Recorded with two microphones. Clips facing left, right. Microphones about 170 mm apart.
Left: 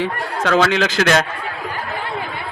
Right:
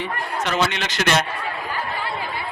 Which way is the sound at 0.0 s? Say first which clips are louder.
Left 5 dB; 90° left.